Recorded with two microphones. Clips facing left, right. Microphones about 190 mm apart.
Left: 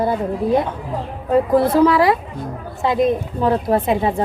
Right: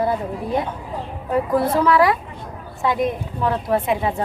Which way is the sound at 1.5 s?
30° left (ahead or behind).